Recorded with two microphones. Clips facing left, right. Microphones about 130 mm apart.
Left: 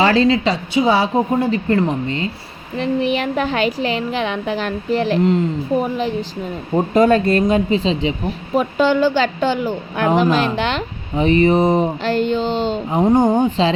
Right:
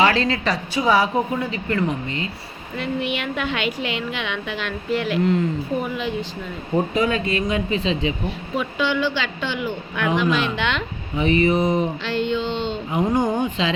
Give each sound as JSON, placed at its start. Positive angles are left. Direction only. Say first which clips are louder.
{"t": 0.0, "sound": "a woman's voice", "louder": "left 5 dB", "side_deg": 35}
{"t": 6.9, "sound": "a woman's voice", "louder": "left 8 dB", "side_deg": 50}
{"t": 8.5, "sound": "a woman's voice", "louder": "left 7 dB", "side_deg": 45}
{"t": 12.0, "sound": "a woman's voice", "louder": "left 5 dB", "side_deg": 45}
{"t": 13.0, "sound": "a woman's voice", "louder": "left 6 dB", "side_deg": 30}